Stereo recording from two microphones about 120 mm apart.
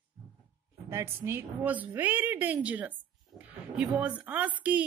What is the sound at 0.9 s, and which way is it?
A woman's voice, 20° right (ahead or behind).